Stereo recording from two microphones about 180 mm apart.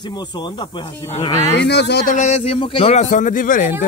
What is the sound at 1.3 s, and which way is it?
Speech, 15° left (ahead or behind).